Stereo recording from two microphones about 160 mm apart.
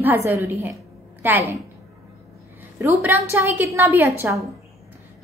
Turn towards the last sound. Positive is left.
turn(degrees=-15)  # may be behind; listen again after turning